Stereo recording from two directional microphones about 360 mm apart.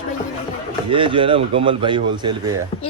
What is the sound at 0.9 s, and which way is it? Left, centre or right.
Speech, centre.